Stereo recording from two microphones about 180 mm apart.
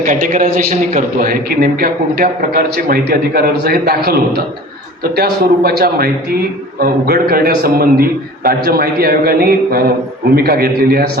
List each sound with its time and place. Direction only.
0.0 s a man's voice: 45° right (ahead or behind)
5.1 s a man's voice: 60° right (ahead or behind)